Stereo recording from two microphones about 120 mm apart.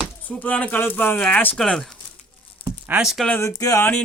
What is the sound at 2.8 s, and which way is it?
Speech, 10° right (ahead or behind).